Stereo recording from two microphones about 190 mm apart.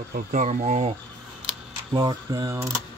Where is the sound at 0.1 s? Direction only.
40° right (ahead or behind).